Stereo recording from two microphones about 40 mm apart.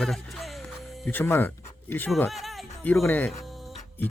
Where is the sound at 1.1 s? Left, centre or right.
Left.